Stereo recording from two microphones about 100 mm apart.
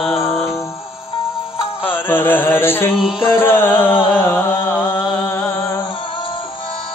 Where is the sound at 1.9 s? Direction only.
20° left (ahead or behind).